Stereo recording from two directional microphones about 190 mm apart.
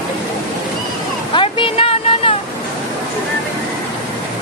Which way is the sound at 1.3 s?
30° left (ahead or behind).